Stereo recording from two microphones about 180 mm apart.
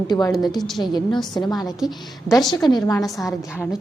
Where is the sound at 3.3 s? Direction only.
10° left (ahead or behind).